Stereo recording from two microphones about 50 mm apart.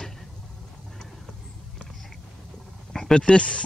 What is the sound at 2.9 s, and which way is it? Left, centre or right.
Speech, centre.